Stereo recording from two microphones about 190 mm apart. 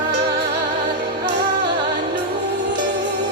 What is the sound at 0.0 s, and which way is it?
Music, 60° right (ahead or behind).